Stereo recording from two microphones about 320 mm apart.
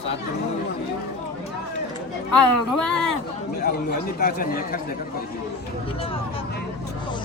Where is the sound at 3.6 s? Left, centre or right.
Left.